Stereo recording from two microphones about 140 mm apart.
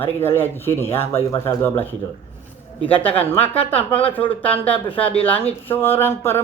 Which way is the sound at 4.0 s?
10° left (ahead or behind).